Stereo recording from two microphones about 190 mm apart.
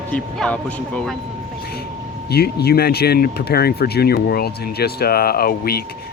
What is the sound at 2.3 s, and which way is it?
Speech, 55° left (ahead or behind).